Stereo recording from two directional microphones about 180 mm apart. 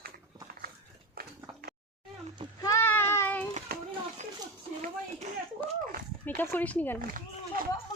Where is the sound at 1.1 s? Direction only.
60° right (ahead or behind).